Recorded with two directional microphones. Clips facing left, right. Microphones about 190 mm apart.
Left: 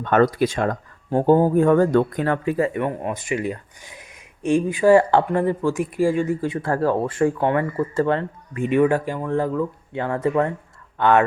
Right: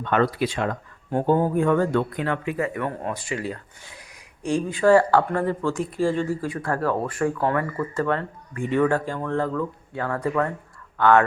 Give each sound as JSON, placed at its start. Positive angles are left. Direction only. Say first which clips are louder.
{"t": 0.0, "sound": "speech", "louder": "left 4 dB", "side_deg": 45}
{"t": 2.8, "sound": "speech", "louder": "left 3 dB", "side_deg": 15}